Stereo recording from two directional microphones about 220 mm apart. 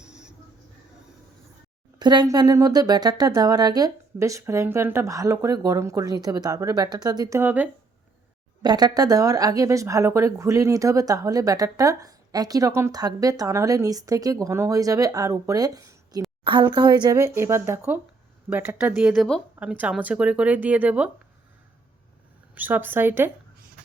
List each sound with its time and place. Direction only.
0.0 s vehicle: 5° right (ahead or behind)
2.0 s speech: 20° right (ahead or behind)
8.6 s speech: 20° right (ahead or behind)
22.5 s speech: 10° right (ahead or behind)